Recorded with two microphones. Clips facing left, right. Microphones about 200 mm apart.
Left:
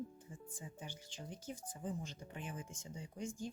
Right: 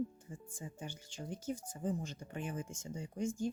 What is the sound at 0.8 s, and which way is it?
Speech, 45° right (ahead or behind).